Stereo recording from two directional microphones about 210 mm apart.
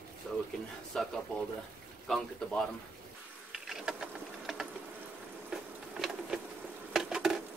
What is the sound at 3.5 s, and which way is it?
Mechanisms, centre (ahead or behind).